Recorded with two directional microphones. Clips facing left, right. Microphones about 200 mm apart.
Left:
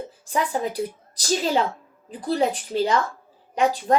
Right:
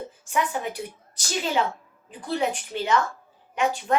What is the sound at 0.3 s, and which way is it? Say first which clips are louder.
A woman's voice: left 2 dB; 35° left (ahead or behind).